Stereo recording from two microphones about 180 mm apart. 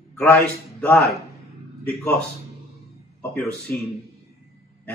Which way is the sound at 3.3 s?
5° left (ahead or behind).